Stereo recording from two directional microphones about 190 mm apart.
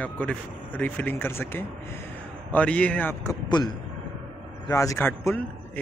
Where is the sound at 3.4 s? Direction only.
20° left (ahead or behind).